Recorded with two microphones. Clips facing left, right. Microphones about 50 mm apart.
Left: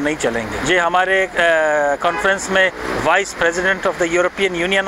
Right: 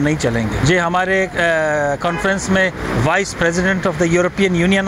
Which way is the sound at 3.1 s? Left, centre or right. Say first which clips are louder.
Left 2 dB; centre.